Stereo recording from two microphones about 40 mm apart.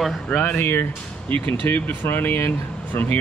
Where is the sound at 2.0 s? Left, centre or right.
Left.